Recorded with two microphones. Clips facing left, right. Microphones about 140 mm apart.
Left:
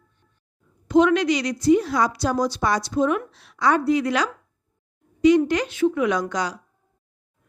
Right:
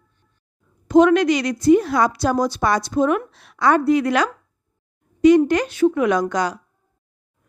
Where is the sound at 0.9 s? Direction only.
45° right (ahead or behind).